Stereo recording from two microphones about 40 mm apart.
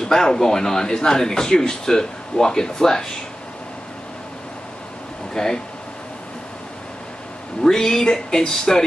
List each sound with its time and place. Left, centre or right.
0.0 s speech: centre
5.3 s speech: centre
7.6 s speech: centre